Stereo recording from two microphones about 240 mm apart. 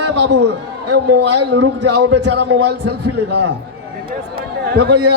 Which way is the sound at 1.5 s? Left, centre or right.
Right.